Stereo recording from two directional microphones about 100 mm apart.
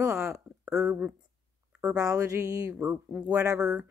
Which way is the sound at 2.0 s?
35° right (ahead or behind).